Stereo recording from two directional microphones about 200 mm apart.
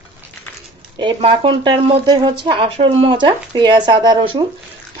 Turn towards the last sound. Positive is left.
turn(degrees=-25)  # may be behind; listen again after turning